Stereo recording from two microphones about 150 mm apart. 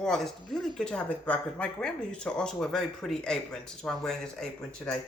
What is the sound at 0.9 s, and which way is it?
Speech, 10° left (ahead or behind).